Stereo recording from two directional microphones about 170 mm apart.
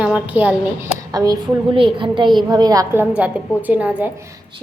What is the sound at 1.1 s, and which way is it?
A woman's voice, 25° right (ahead or behind).